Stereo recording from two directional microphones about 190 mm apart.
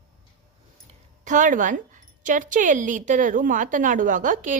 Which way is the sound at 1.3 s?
45° right (ahead or behind).